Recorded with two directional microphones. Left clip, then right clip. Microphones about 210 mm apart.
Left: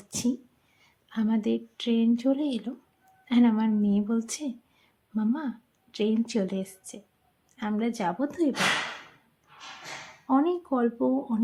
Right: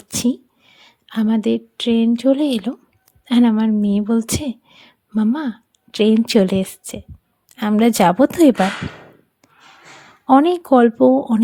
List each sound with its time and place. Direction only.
0.1 s a sound: 40° right (ahead or behind)
0.8 s a woman's voice: 40° right (ahead or behind)
10.2 s speech: 45° right (ahead or behind)